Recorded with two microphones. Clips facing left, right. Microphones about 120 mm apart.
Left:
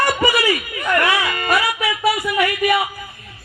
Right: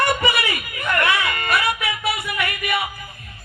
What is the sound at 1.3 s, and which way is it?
Music, 30° left (ahead or behind).